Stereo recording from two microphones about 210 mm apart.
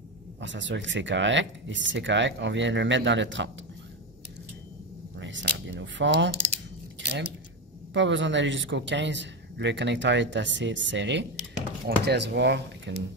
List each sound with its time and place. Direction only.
0.4 s speech: 60° right (ahead or behind)
5.2 s a sound: 60° right (ahead or behind)
7.1 s speech: 55° right (ahead or behind)